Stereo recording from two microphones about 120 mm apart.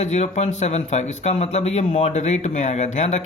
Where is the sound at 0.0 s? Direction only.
70° left (ahead or behind).